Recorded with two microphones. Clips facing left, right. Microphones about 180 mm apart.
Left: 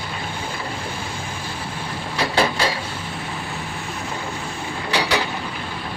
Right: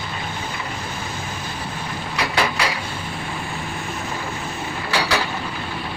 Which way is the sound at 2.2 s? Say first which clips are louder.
Left 2 dB; 30° left (ahead or behind).